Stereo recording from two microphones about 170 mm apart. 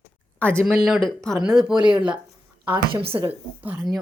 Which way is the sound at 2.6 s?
30° right (ahead or behind).